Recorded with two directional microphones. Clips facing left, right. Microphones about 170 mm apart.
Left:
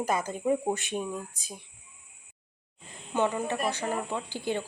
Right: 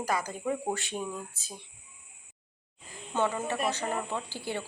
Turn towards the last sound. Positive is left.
turn(degrees=15)  # may be behind; listen again after turning